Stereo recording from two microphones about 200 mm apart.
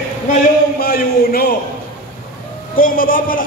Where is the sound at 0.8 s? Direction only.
50° left (ahead or behind).